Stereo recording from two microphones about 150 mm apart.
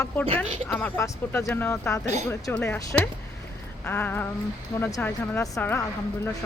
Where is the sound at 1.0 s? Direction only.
20° left (ahead or behind).